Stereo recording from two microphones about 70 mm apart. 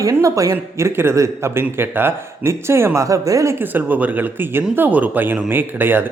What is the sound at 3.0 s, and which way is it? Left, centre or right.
Speech, right.